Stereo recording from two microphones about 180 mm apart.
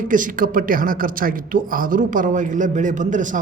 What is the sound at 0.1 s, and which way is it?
A man's voice, 50° right (ahead or behind).